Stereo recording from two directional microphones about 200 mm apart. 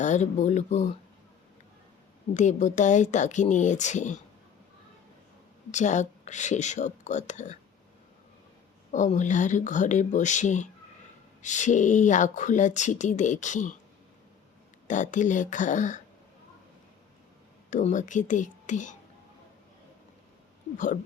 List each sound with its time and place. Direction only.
0.0 s speech: 35° left (ahead or behind)
2.3 s speech: 35° left (ahead or behind)
5.7 s speech: 35° left (ahead or behind)
8.9 s speech: 40° left (ahead or behind)
14.8 s speech: 40° left (ahead or behind)
17.7 s speech: 40° left (ahead or behind)
20.7 s speech: 40° left (ahead or behind)